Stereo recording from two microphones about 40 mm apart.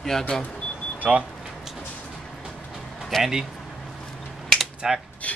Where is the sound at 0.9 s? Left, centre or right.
Right.